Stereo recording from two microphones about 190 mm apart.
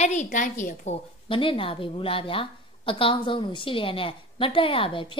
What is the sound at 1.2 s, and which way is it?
A woman's voice, 25° left (ahead or behind).